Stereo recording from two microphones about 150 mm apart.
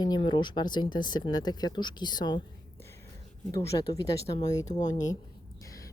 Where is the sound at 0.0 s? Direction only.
30° left (ahead or behind).